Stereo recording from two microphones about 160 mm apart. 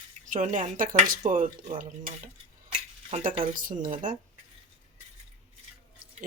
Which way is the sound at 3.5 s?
55° right (ahead or behind).